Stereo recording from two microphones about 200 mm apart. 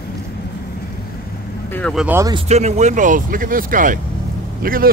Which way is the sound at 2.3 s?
35° right (ahead or behind).